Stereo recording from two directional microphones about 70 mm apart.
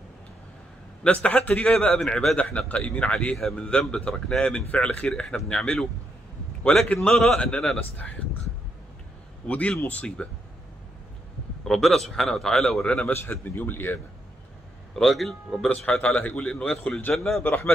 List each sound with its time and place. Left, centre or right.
1.0 s a man's voice: centre
3.3 s a man's voice: centre
9.5 s a man's voice: centre
11.6 s a man's voice: centre
12.8 s a man's voice: centre
13.1 s speech: left
15.0 s a man's voice: centre
16.0 s a man's voice: centre